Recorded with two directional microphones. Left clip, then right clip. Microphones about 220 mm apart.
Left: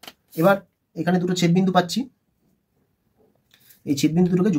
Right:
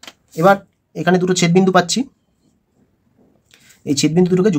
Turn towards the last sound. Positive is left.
turn(degrees=-25)  # may be behind; listen again after turning